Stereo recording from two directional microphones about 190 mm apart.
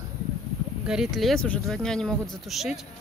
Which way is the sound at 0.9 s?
Centre (ahead or behind).